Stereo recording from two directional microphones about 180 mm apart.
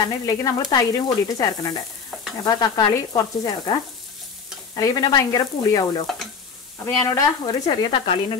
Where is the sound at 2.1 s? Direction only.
Centre (ahead or behind).